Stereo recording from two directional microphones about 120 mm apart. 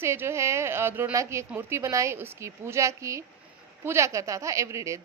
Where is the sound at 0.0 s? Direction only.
20° right (ahead or behind).